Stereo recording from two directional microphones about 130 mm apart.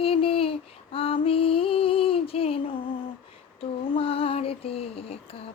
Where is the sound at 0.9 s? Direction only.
45° left (ahead or behind).